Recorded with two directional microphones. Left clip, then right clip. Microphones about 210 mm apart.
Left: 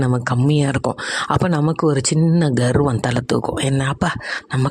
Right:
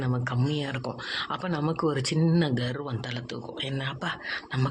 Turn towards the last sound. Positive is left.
turn(degrees=50)  # may be behind; listen again after turning